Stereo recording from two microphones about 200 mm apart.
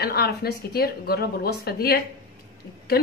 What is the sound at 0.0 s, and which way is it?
Speech, 50° left (ahead or behind).